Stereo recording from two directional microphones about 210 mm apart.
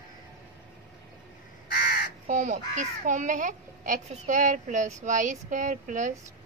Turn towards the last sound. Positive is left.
turn(degrees=-35)  # may be behind; listen again after turning